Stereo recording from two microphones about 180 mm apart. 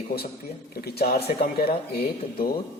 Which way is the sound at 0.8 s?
60° left (ahead or behind).